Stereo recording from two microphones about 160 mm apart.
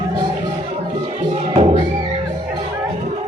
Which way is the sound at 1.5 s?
40° right (ahead or behind).